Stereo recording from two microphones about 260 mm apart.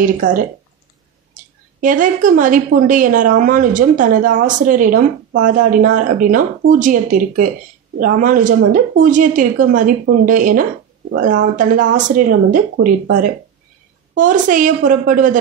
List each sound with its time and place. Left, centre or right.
0.0 s a woman's voice: right